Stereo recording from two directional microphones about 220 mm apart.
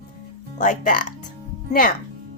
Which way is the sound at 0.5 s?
35° left (ahead or behind).